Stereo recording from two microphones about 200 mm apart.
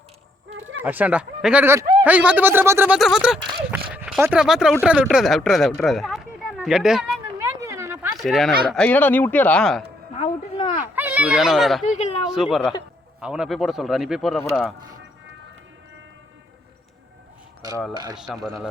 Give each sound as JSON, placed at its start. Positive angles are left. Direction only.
{"t": 0.8, "sound": "speech", "side_deg": -10}
{"t": 7.4, "sound": "a sound", "side_deg": -15}
{"t": 8.2, "sound": "speech", "side_deg": 0}
{"t": 10.2, "sound": "a sound", "side_deg": 40}
{"t": 10.9, "sound": "speech", "side_deg": -10}
{"t": 11.9, "sound": "speech", "side_deg": 35}
{"t": 12.2, "sound": "speech", "side_deg": -5}
{"t": 17.9, "sound": "speech", "side_deg": -20}
{"t": 18.2, "sound": "speech", "side_deg": 0}